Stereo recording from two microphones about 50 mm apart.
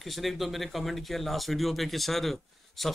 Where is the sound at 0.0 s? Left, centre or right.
Centre.